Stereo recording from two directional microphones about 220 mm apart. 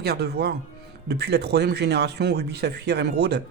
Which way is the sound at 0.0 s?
45° right (ahead or behind).